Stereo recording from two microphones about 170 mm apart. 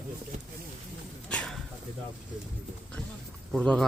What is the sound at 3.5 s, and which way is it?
Speech, 5° left (ahead or behind).